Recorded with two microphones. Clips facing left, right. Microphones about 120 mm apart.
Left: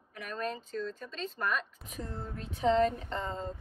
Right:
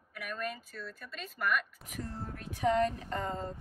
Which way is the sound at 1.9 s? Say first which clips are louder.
Even; 30° left (ahead or behind).